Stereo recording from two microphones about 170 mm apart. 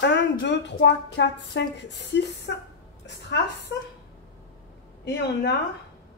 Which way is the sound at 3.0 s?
90° left.